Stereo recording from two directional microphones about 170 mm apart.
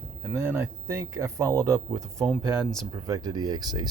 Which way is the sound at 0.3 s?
15° right (ahead or behind).